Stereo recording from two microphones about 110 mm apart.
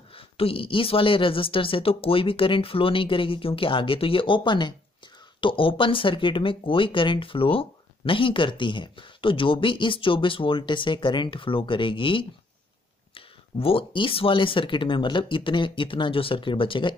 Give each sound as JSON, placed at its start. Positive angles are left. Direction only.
{"t": 0.1, "sound": "speech", "side_deg": 55}